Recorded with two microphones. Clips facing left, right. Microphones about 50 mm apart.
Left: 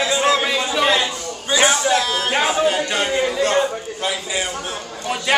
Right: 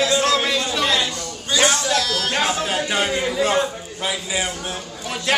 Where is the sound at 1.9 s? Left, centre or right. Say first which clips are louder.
Left 3 dB; left.